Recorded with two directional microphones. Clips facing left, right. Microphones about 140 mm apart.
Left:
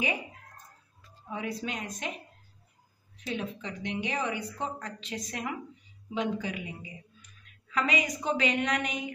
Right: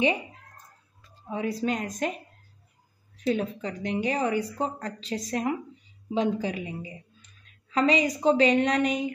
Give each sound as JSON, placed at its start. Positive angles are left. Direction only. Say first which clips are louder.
{"t": 1.3, "sound": "a woman's voice", "louder": "right 7 dB", "side_deg": -35}
{"t": 3.3, "sound": "a woman's voice", "louder": "right 8 dB", "side_deg": -40}